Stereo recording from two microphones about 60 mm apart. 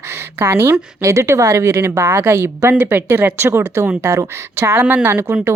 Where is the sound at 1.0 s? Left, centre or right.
Right.